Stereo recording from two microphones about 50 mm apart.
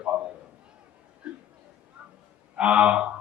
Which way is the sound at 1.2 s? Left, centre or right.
Right.